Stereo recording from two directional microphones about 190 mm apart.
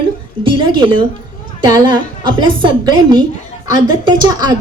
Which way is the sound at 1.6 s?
20° right (ahead or behind).